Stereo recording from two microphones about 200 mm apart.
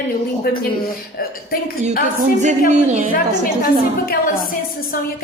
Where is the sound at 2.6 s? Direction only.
35° right (ahead or behind).